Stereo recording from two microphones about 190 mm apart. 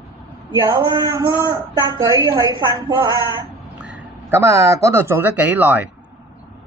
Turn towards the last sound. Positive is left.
turn(degrees=-10)  # may be behind; listen again after turning